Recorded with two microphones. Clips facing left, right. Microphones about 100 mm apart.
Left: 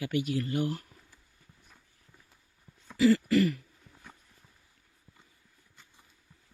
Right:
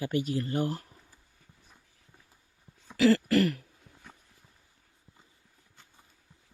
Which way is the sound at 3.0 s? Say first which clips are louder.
Even; 70° right (ahead or behind).